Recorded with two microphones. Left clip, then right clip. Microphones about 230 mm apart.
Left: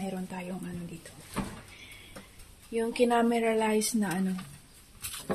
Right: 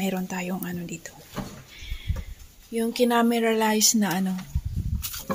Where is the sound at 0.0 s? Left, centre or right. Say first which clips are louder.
Right 8 dB; right.